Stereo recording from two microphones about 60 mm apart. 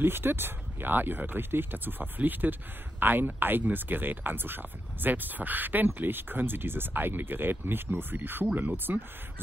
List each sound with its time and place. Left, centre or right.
0.0 s speech: right